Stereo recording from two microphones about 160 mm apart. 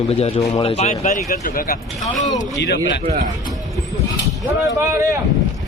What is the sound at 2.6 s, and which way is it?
Speech, 90° left.